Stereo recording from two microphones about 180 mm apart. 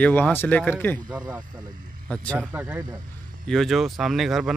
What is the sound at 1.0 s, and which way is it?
Speech, 20° right (ahead or behind).